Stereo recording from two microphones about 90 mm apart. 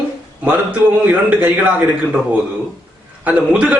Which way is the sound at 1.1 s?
15° right (ahead or behind).